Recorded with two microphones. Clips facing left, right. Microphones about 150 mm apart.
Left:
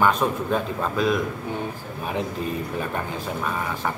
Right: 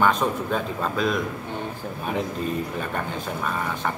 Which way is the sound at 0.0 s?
5° left (ahead or behind).